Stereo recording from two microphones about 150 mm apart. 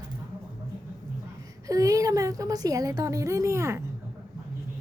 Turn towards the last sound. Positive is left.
turn(degrees=-20)  # may be behind; listen again after turning